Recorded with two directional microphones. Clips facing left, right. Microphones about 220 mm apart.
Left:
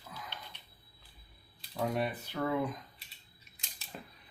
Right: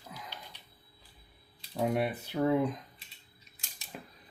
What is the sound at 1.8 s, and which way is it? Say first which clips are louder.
Speech: right 3 dB; 15° right (ahead or behind).